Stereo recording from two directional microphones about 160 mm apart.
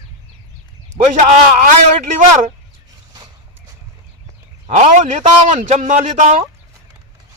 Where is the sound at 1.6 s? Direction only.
50° right (ahead or behind).